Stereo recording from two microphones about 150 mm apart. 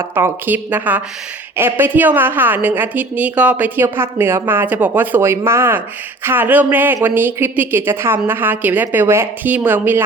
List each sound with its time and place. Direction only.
0.0 s a woman's voice: 15° right (ahead or behind)